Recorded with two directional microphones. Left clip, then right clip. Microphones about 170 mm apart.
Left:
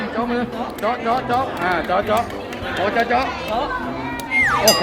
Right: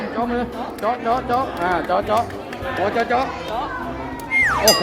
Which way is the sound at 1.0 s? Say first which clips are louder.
Left 1 dB; 20° right (ahead or behind).